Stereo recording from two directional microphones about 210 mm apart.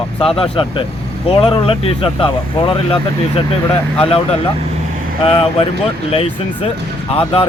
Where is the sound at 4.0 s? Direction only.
25° left (ahead or behind).